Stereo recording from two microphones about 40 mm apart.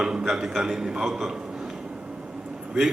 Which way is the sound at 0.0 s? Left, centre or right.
Centre.